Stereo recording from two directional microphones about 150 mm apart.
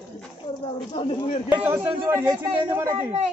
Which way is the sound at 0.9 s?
45° left (ahead or behind).